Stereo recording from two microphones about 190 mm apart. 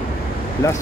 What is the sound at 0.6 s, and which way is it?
Speech, 15° left (ahead or behind).